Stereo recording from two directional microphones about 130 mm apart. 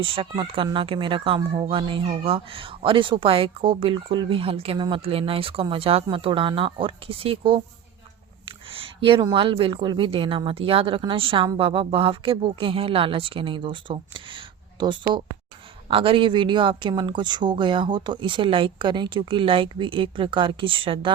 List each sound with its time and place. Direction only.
0.0 s speech: 45° right (ahead or behind)